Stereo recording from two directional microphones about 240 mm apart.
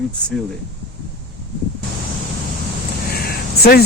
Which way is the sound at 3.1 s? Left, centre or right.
Left.